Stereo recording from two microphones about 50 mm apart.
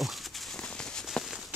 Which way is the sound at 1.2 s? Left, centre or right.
Centre.